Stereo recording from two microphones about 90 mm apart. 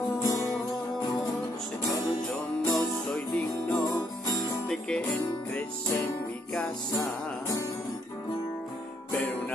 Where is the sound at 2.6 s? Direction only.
15° left (ahead or behind).